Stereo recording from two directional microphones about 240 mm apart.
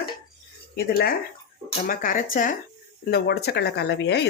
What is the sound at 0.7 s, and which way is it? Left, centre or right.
Speech, left.